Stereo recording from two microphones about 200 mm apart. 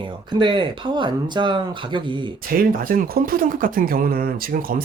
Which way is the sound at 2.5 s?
45° right (ahead or behind).